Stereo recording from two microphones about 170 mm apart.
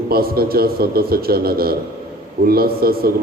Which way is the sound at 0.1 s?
65° right (ahead or behind).